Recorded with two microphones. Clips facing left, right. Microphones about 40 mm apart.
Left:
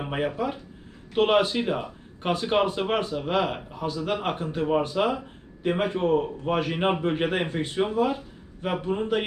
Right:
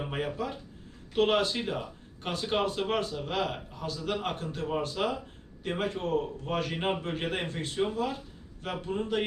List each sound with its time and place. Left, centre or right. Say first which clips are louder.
0.0 s speech: left 6 dB; left